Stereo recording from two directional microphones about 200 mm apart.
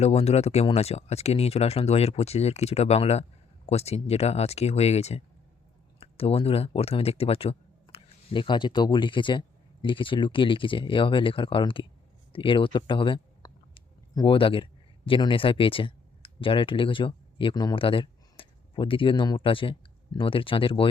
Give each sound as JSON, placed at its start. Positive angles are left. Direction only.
{"t": 0.0, "sound": "speech", "side_deg": 30}